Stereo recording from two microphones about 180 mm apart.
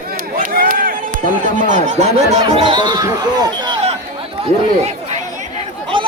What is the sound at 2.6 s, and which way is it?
Speech, 25° right (ahead or behind).